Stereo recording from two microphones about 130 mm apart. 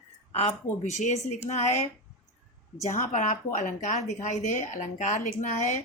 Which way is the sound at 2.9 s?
70° left (ahead or behind).